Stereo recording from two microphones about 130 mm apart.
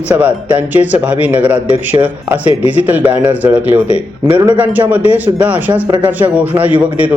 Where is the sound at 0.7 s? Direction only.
10° right (ahead or behind).